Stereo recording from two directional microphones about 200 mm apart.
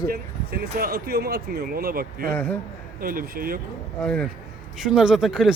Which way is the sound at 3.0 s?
45° right (ahead or behind).